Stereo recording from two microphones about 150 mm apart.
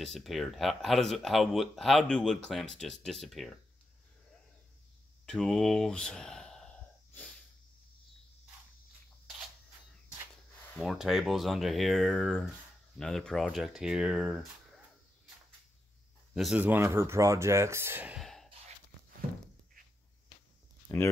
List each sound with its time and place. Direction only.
0.0 s speech: centre (ahead or behind)
5.2 s speech: 5° left (ahead or behind)
10.8 s speech: centre (ahead or behind)
16.3 s speech: 5° right (ahead or behind)
18.2 s a sound: centre (ahead or behind)
20.9 s speech: 20° left (ahead or behind)